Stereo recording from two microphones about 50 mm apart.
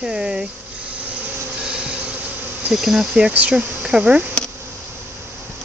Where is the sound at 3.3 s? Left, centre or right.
Right.